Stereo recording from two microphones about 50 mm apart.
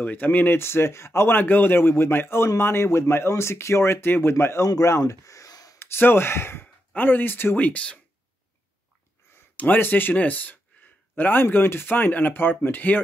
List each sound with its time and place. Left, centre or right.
0.0 s speech: left
0.6 s a man's voice: left
1.3 s a man's voice: left
5.9 s speech: left
7.0 s speech: left
7.5 s speech: left
9.6 s speech: left